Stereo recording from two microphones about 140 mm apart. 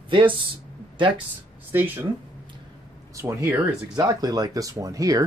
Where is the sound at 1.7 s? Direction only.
15° right (ahead or behind).